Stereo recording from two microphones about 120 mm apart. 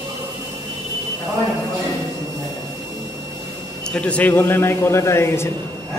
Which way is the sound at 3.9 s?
10° left (ahead or behind).